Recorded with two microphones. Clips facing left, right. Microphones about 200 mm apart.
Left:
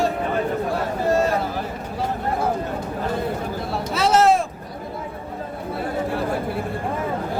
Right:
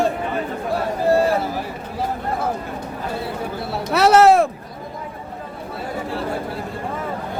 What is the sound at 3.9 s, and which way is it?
Speech, 65° right (ahead or behind).